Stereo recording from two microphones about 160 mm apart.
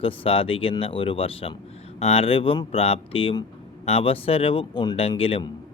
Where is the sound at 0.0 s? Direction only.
35° left (ahead or behind).